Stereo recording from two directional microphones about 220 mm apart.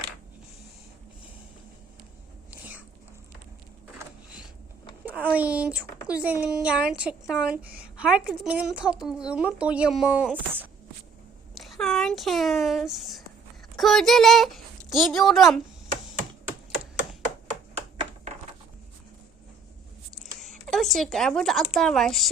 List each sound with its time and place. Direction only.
5.0 s a woman's voice: 5° right (ahead or behind)
20.4 s speech: centre (ahead or behind)